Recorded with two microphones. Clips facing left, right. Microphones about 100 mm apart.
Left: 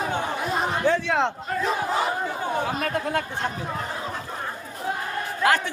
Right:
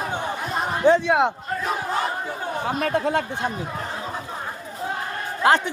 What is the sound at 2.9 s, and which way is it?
Speech, 25° right (ahead or behind).